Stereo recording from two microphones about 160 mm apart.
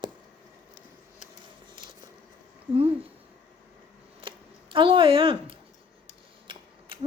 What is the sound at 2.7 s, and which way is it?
Speech, 35° right (ahead or behind).